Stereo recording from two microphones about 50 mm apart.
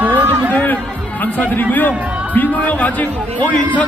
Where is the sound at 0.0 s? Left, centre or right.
Right.